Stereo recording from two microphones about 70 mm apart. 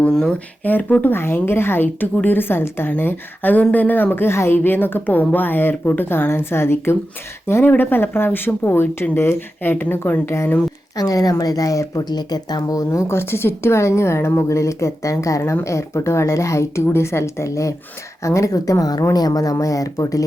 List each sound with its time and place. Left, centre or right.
0.0 s speech: centre
0.6 s a woman's voice: left
10.9 s speech: left
12.0 s a woman's voice: left
14.4 s speech: left